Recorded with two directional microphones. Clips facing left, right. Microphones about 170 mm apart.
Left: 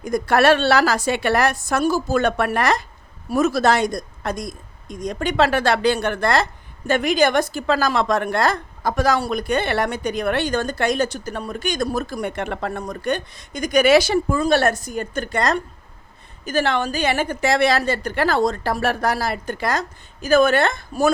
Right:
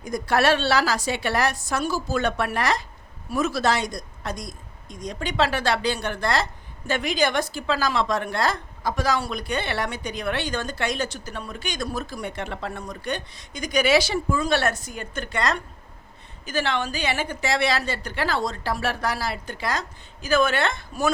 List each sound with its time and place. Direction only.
0.0 s a woman's voice: 55° left (ahead or behind)